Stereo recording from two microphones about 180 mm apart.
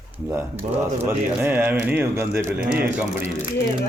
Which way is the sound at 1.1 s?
10° right (ahead or behind).